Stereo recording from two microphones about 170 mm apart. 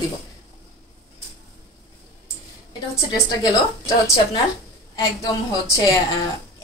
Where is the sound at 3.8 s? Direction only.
20° left (ahead or behind).